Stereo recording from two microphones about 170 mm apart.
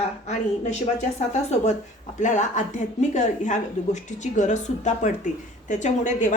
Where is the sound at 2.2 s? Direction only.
45° left (ahead or behind).